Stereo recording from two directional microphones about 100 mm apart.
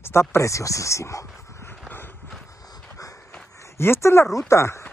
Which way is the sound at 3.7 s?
25° left (ahead or behind).